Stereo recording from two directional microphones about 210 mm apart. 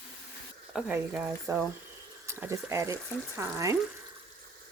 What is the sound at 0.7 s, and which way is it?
Speech, 5° right (ahead or behind).